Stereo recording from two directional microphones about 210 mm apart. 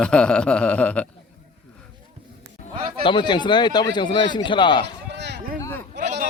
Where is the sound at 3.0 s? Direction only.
25° left (ahead or behind).